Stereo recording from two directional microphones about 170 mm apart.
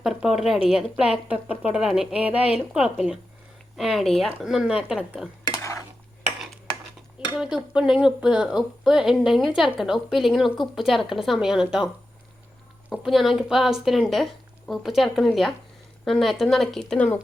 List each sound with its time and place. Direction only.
0.0 s a woman's voice: centre (ahead or behind)
7.3 s a woman's voice: 5° right (ahead or behind)
13.0 s a woman's voice: centre (ahead or behind)